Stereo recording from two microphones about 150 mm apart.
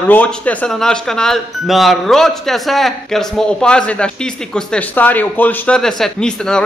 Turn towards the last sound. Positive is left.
turn(degrees=5)  # may be behind; listen again after turning